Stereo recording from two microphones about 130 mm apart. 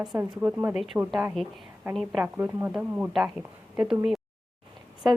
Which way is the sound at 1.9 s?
15° right (ahead or behind).